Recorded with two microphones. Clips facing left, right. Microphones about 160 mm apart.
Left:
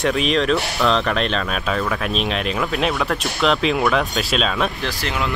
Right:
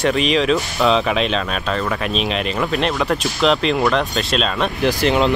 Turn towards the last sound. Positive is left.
turn(degrees=-20)  # may be behind; listen again after turning